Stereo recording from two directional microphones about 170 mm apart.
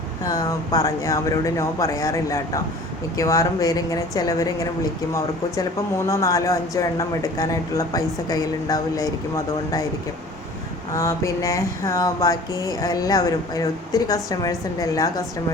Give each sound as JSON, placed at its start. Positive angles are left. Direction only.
{"t": 0.3, "sound": "speech", "side_deg": 20}
{"t": 10.9, "sound": "speech", "side_deg": 20}